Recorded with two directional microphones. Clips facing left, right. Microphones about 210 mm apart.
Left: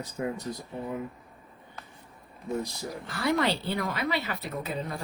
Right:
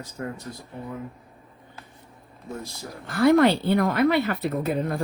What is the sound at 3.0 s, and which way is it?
A woman's voice, 55° right (ahead or behind).